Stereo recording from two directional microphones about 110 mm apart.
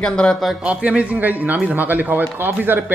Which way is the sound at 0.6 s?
10° right (ahead or behind).